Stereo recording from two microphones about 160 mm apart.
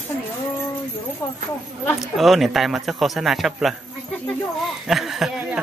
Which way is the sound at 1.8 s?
Centre (ahead or behind).